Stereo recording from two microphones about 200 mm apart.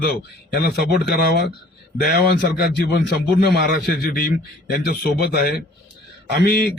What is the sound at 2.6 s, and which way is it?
A man's voice, 55° left (ahead or behind).